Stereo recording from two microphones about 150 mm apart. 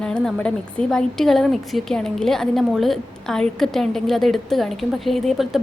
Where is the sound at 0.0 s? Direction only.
5° left (ahead or behind).